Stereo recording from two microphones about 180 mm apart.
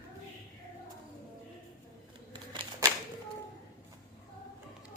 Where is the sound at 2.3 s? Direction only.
25° right (ahead or behind).